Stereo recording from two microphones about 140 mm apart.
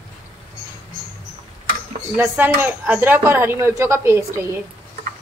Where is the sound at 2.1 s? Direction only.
15° right (ahead or behind).